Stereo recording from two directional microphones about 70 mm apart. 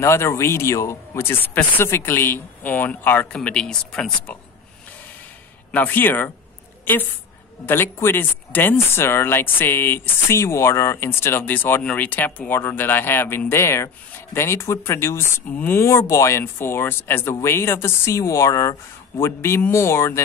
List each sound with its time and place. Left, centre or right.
0.0 s speech: left
3.3 s speech: centre
5.7 s speech: left
6.8 s a sound: left
7.6 s speech: left